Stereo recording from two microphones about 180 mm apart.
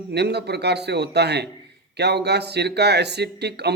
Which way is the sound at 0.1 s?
65° right (ahead or behind).